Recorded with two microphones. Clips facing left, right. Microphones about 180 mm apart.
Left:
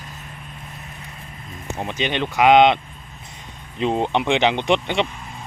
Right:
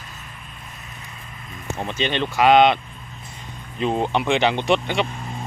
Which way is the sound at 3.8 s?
20° left (ahead or behind).